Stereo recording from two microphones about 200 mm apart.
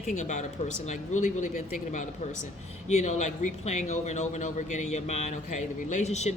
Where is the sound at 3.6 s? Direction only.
35° left (ahead or behind).